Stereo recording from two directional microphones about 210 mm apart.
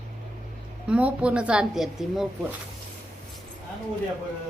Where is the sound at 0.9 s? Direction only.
5° right (ahead or behind).